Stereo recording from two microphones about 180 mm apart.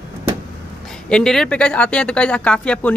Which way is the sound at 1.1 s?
5° left (ahead or behind).